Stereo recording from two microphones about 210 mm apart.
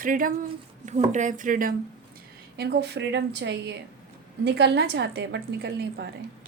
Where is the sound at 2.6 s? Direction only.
50° right (ahead or behind).